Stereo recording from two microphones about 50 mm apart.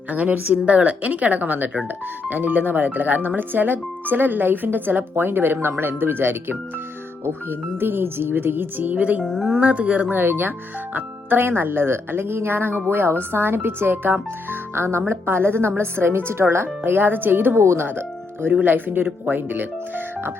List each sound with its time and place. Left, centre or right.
0.1 s speech: right
7.8 s speech: right
9.2 s speech: centre
9.5 s speech: right
10.1 s speech: right
14.9 s speech: right
17.6 s speech: right